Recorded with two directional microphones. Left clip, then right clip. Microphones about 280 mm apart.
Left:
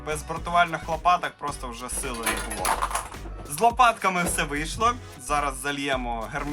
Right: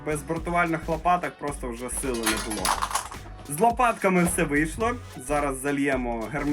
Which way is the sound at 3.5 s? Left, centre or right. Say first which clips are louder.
Left 2 dB; centre.